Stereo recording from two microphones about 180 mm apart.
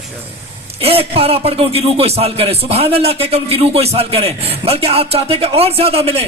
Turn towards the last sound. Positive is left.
turn(degrees=-35)  # may be behind; listen again after turning